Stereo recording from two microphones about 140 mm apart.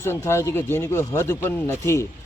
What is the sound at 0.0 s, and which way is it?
Speech, 20° left (ahead or behind).